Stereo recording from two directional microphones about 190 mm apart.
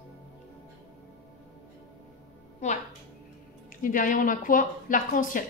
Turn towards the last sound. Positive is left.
turn(degrees=45)  # may be behind; listen again after turning